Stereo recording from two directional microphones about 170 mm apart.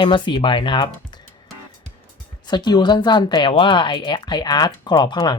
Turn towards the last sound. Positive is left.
turn(degrees=25)  # may be behind; listen again after turning